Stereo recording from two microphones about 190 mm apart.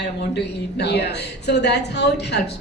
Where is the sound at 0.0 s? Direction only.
60° left (ahead or behind).